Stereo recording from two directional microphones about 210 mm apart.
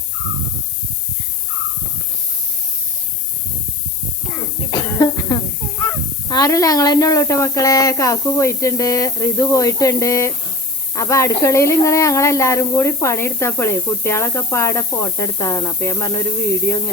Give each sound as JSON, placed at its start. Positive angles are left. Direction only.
{"t": 4.3, "sound": "cough", "side_deg": 15}
{"t": 6.2, "sound": "speech", "side_deg": 15}